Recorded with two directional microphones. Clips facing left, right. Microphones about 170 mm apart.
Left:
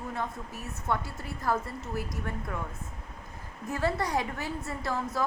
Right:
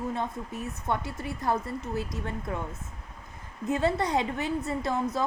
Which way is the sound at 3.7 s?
20° right (ahead or behind).